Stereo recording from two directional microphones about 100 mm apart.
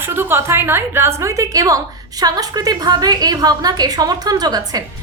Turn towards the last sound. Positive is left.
turn(degrees=-40)  # may be behind; listen again after turning